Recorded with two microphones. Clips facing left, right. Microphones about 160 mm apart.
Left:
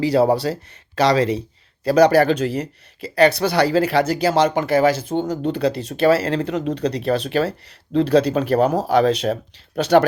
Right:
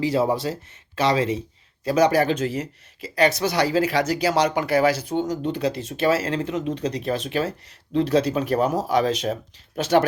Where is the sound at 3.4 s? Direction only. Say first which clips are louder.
Left 4 dB; 30° left (ahead or behind).